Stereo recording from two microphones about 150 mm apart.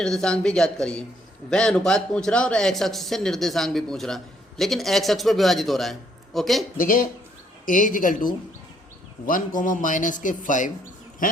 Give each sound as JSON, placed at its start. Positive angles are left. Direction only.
{"t": 0.0, "sound": "a man's voice", "side_deg": 5}
{"t": 6.7, "sound": "a man's voice", "side_deg": 65}